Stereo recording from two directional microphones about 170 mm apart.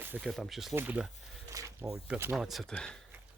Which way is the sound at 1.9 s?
10° right (ahead or behind).